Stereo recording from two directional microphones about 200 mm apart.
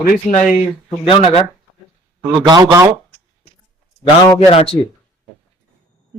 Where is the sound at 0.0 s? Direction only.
35° left (ahead or behind).